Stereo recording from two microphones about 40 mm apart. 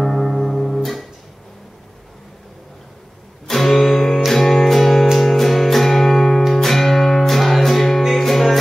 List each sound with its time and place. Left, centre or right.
0.0 s music: centre
3.4 s music: centre